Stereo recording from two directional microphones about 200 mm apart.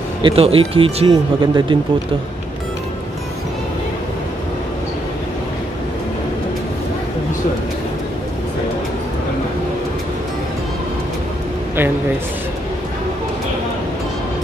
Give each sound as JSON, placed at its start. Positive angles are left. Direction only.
{"t": 0.2, "sound": "speech", "side_deg": -25}